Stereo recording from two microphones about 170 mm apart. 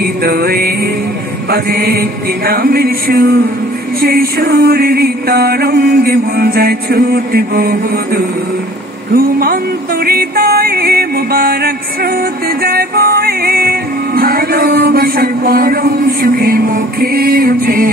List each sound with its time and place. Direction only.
0.0 s music: 65° right (ahead or behind)